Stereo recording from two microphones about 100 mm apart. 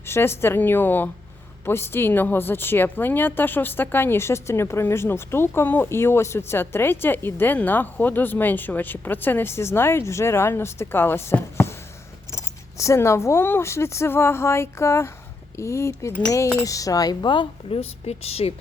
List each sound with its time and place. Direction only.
0.0 s a woman's voice: 25° left (ahead or behind); by 17.4 s 45° left (ahead or behind)
17.7 s speech: 85° left